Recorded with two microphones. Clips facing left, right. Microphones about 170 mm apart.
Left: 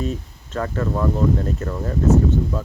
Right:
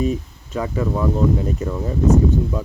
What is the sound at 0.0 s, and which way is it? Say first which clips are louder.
Speech: right 5 dB; 10° right (ahead or behind).